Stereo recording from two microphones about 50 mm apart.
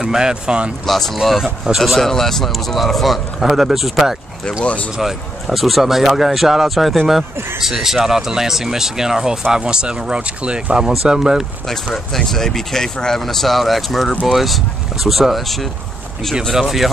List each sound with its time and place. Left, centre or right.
0.0 s speech: centre
0.8 s speech: centre
11.6 s speech: centre